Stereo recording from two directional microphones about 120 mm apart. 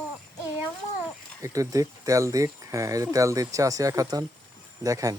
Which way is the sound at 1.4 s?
30° right (ahead or behind).